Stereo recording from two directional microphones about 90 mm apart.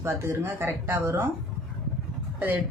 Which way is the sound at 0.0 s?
30° right (ahead or behind).